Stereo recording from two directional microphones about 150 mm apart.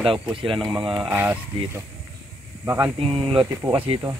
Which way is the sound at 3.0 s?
40° right (ahead or behind).